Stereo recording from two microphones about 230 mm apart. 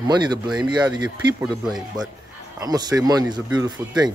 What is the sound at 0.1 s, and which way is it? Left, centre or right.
Speech, centre.